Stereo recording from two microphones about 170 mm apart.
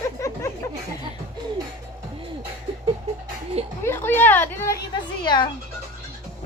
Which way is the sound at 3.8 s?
15° left (ahead or behind).